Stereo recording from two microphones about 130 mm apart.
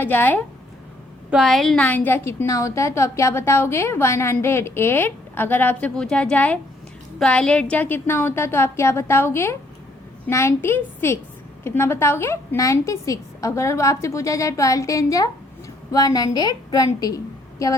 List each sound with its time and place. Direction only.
0.0 s a woman's voice: 15° left (ahead or behind)
1.3 s a woman's voice: centre (ahead or behind); by 17.2 s 30° left (ahead or behind)